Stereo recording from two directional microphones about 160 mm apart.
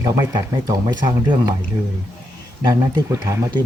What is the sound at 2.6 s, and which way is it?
Speech, 25° right (ahead or behind).